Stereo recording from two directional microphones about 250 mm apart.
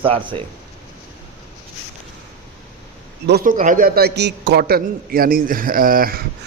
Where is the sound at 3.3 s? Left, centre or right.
Right.